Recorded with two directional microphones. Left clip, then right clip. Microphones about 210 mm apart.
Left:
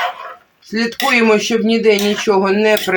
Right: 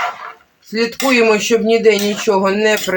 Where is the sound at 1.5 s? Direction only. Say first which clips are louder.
Right 2 dB; 45° left (ahead or behind).